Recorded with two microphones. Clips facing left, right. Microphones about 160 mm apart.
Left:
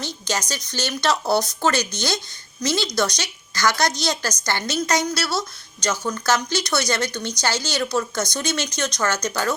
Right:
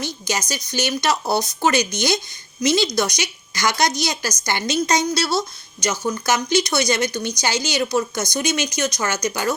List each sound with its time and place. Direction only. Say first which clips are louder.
0.0 s speech: right 1 dB; 10° right (ahead or behind)